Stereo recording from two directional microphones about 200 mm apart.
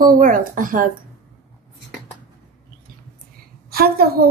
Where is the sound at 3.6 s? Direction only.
50° right (ahead or behind).